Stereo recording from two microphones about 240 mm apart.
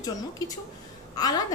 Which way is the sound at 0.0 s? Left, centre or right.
Centre.